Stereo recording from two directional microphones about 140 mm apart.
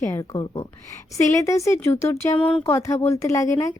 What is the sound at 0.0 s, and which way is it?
Speech, 25° left (ahead or behind).